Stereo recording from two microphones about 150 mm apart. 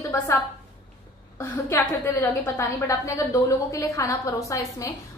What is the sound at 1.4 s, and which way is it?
A woman's voice, 15° left (ahead or behind).